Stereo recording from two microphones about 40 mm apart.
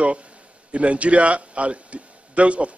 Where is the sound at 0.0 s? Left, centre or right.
Right.